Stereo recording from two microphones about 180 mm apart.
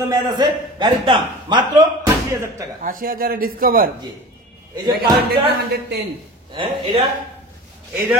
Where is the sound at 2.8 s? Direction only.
50° right (ahead or behind).